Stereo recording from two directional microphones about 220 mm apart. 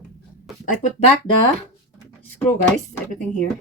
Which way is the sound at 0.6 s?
35° left (ahead or behind).